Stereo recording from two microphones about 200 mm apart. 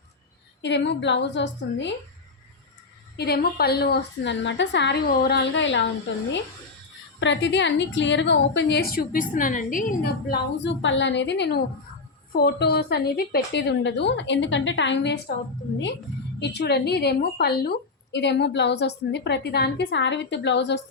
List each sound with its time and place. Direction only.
0.6 s a woman's voice: 60° left (ahead or behind)
3.2 s a woman's voice: 50° left (ahead or behind)
7.2 s a woman's voice: 65° left (ahead or behind)
16.4 s a woman's voice: 55° left (ahead or behind)